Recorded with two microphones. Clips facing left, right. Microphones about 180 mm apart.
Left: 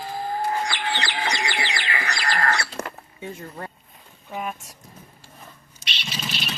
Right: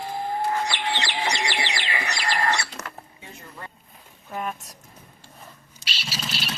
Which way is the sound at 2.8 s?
30° left (ahead or behind).